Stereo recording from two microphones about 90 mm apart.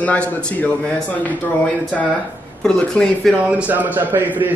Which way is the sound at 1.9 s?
Centre (ahead or behind).